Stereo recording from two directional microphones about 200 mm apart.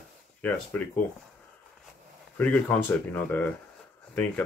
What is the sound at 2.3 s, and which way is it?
Speech, 10° left (ahead or behind).